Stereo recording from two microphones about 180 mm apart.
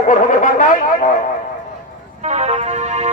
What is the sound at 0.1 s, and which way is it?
Speech, 45° left (ahead or behind).